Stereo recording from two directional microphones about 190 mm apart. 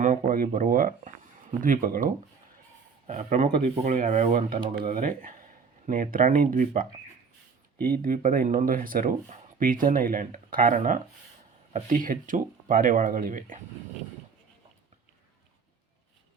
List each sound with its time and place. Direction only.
0.0 s speech: 45° right (ahead or behind)
4.5 s speech: 25° right (ahead or behind)
4.9 s speech: 45° right (ahead or behind)
7.9 s speech: 45° right (ahead or behind)